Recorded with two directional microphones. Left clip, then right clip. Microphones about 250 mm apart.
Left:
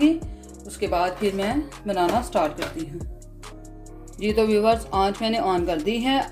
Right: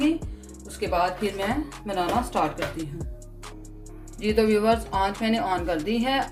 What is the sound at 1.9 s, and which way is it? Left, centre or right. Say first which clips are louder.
Speech: left 3 dB; left.